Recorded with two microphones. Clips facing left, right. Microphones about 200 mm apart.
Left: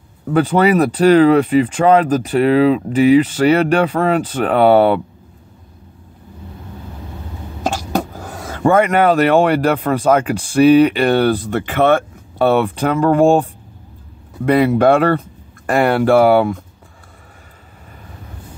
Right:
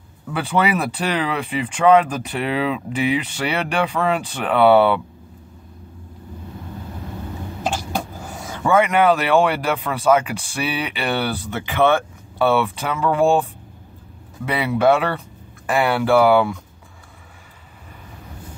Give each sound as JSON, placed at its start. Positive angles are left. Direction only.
{"t": 0.3, "sound": "speech", "side_deg": 40}
{"t": 8.4, "sound": "a sound", "side_deg": 60}
{"t": 8.6, "sound": "speech", "side_deg": 45}